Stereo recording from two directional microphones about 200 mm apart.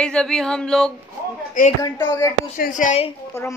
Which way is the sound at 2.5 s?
40° left (ahead or behind).